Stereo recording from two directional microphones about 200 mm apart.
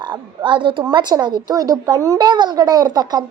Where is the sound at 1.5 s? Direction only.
20° right (ahead or behind).